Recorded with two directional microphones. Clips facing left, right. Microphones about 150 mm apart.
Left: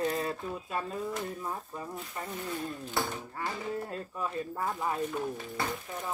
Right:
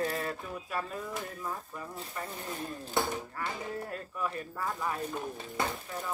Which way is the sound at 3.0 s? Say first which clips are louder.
Right 2 dB; 20° right (ahead or behind).